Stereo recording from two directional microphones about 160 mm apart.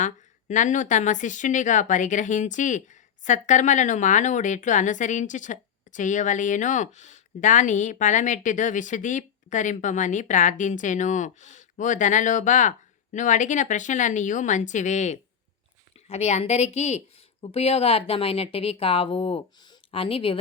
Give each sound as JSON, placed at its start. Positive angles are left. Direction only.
{"t": 0.0, "sound": "a woman's voice", "side_deg": 50}